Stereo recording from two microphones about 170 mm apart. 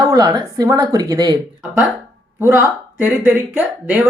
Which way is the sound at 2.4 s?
10° right (ahead or behind).